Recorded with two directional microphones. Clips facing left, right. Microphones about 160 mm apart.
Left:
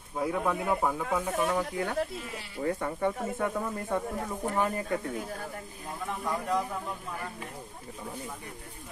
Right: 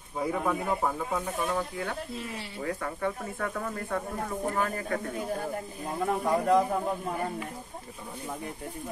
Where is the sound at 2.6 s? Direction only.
25° left (ahead or behind).